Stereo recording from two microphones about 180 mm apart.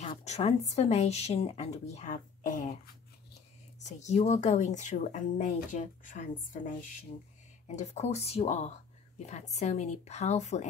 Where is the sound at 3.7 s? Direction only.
40° left (ahead or behind).